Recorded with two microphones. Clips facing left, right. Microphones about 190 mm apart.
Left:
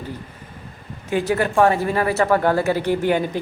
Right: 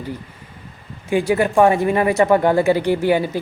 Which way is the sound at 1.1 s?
10° right (ahead or behind).